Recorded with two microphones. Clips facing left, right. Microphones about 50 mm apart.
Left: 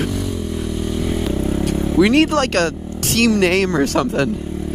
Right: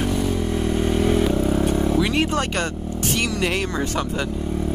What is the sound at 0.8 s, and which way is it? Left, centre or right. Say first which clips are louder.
Vehicle: right 3 dB; right.